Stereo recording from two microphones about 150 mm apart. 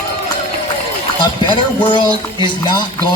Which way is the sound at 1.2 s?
30° left (ahead or behind).